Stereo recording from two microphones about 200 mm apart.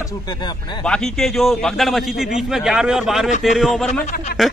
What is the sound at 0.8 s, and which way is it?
A man's voice, 5° left (ahead or behind).